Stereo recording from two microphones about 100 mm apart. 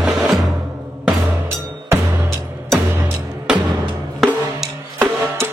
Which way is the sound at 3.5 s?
10° right (ahead or behind).